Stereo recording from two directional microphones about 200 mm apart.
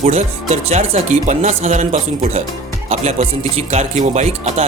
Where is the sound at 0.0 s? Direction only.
35° right (ahead or behind).